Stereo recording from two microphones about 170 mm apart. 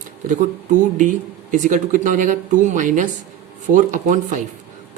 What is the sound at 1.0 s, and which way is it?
Speech, 45° right (ahead or behind).